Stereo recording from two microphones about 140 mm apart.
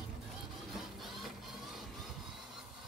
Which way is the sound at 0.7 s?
Centre (ahead or behind).